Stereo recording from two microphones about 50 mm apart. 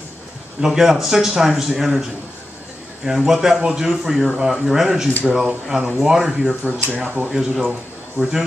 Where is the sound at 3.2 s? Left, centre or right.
Centre.